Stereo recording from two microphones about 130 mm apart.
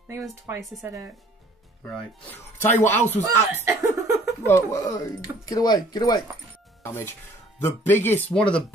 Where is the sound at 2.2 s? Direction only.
15° left (ahead or behind).